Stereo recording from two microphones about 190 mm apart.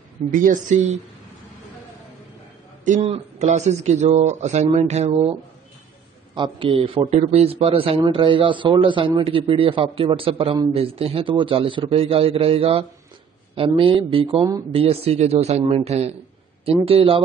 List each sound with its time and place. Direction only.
0.3 s speech: 45° right (ahead or behind)
2.8 s a man's voice: 35° right (ahead or behind)